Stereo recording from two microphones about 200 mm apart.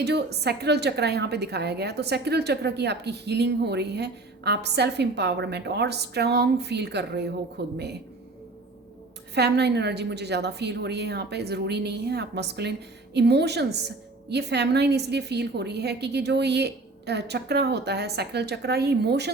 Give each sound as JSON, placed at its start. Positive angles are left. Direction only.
{"t": 0.0, "sound": "a woman's voice", "side_deg": -55}
{"t": 9.3, "sound": "a woman's voice", "side_deg": -55}